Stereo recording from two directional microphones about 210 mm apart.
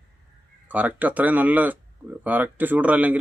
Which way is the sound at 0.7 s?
5° right (ahead or behind).